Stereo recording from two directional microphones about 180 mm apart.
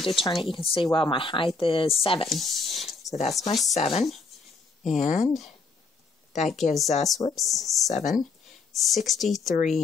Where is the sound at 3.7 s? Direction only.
35° left (ahead or behind).